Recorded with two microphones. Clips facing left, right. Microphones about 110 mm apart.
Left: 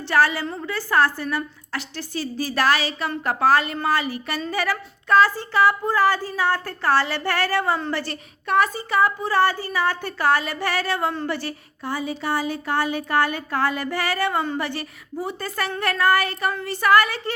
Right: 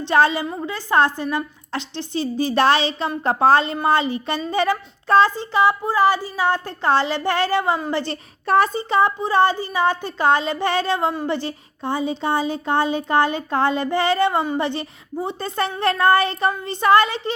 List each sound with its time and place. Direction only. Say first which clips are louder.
0.0 s speech: right 3 dB; 20° right (ahead or behind)